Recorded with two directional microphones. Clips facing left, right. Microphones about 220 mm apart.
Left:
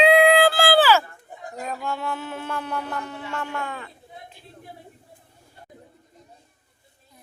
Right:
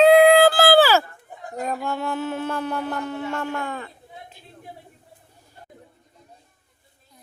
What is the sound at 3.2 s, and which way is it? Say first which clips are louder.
Speech: right 4 dB; 35° right (ahead or behind).